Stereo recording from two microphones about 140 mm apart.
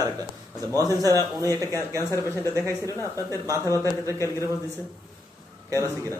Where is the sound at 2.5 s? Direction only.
20° right (ahead or behind).